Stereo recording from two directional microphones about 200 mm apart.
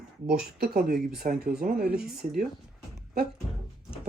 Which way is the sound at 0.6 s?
50° right (ahead or behind).